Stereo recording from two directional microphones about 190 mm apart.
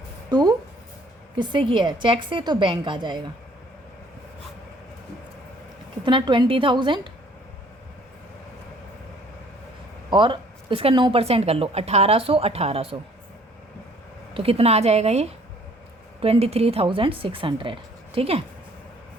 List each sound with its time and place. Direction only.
0.3 s a woman's voice: 20° right (ahead or behind)
6.1 s a woman's voice: 25° right (ahead or behind)
10.1 s speech: 25° right (ahead or behind)
14.3 s a woman's voice: 30° right (ahead or behind)